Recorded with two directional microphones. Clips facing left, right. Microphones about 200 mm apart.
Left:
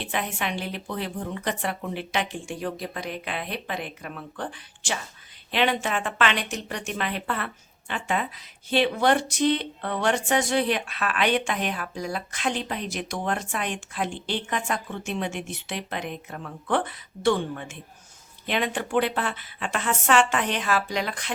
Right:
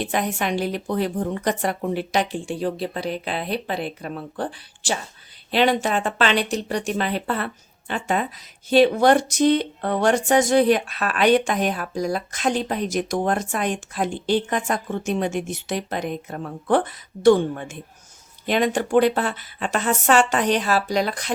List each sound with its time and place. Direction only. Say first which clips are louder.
0.0 s speech: right 6 dB; 40° right (ahead or behind)
5.5 s speech: right 5 dB; 35° right (ahead or behind)